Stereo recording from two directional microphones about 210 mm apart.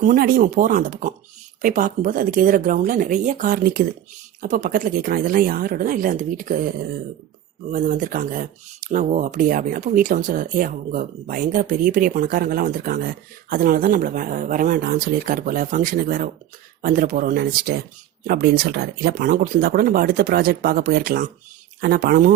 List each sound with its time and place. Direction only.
0.0 s speech: 40° right (ahead or behind)